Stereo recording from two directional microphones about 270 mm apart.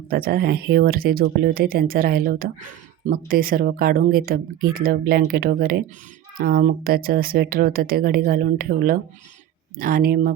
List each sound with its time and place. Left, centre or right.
0.1 s speech: right